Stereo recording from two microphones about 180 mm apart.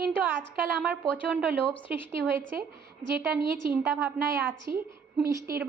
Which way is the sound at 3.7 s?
10° right (ahead or behind).